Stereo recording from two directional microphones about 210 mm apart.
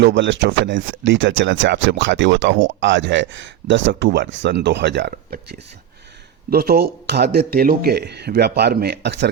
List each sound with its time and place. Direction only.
0.0 s speech: 60° right (ahead or behind)